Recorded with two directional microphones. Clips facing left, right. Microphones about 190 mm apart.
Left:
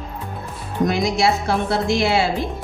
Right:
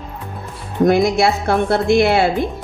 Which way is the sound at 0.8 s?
55° right (ahead or behind).